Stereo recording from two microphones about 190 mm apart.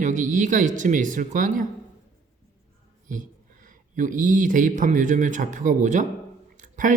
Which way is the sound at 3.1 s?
45° right (ahead or behind).